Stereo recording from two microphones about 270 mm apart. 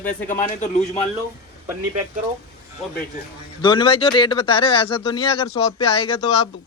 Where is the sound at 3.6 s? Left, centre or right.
Centre.